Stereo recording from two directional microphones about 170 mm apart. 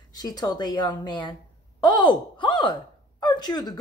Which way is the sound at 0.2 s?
25° left (ahead or behind).